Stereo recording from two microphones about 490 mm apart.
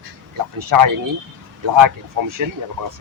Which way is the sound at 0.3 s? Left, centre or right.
Right.